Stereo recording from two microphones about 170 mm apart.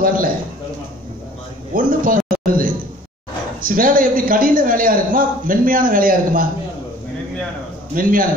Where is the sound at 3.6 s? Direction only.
55° right (ahead or behind).